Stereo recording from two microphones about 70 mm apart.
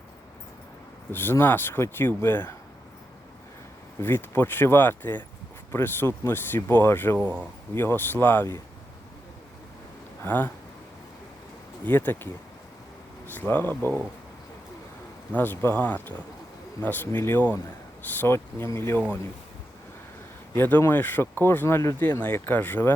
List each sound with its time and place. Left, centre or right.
1.1 s speech: left
4.0 s speech: left
7.2 s speech: centre
7.8 s speech: left
10.2 s speech: left
11.9 s speech: left
15.4 s speech: left
18.3 s speech: left
20.6 s speech: left